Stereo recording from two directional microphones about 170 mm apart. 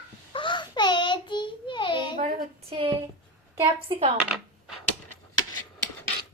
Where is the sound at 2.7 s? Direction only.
30° right (ahead or behind).